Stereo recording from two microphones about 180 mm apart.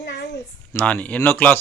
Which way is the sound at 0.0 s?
75° left (ahead or behind).